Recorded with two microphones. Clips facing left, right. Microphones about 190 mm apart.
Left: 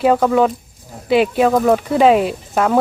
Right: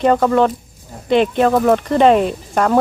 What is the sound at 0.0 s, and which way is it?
Speech, 5° left (ahead or behind).